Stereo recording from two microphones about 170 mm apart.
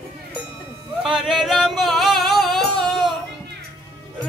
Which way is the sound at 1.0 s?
5° right (ahead or behind).